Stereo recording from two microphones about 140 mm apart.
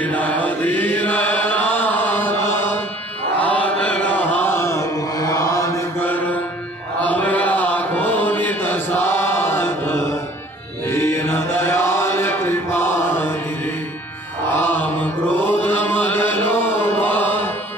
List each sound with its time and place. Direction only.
0.0 s chant: 10° left (ahead or behind)
10.9 s mantra: 20° left (ahead or behind)
14.5 s mantra: 15° left (ahead or behind)
15.4 s chant: 15° left (ahead or behind)